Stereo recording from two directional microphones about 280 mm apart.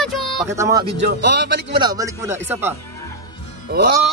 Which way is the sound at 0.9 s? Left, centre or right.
Right.